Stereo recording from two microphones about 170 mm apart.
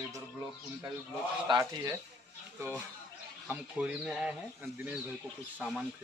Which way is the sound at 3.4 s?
5° right (ahead or behind).